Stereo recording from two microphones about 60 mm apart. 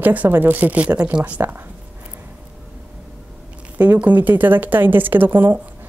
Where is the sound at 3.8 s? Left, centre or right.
Right.